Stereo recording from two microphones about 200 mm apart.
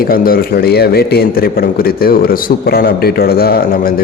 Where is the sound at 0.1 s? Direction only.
45° left (ahead or behind).